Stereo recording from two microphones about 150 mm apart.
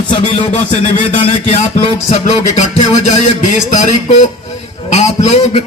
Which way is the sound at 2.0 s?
55° left (ahead or behind).